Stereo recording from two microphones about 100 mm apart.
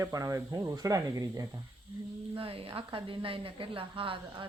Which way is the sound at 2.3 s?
65° right (ahead or behind).